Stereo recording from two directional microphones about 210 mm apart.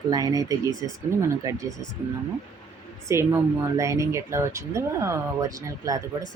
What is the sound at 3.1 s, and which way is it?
Speech, 15° right (ahead or behind).